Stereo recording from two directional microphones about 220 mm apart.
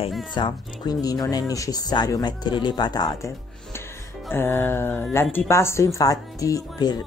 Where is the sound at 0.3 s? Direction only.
20° left (ahead or behind).